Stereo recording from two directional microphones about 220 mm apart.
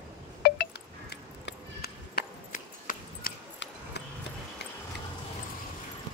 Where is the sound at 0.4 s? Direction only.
45° left (ahead or behind).